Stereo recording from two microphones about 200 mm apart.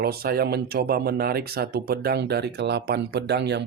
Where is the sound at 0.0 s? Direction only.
50° right (ahead or behind).